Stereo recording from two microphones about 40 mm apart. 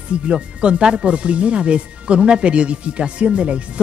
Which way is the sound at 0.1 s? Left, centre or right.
Right.